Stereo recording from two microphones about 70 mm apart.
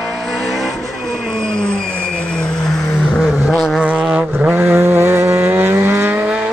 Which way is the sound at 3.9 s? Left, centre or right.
Centre.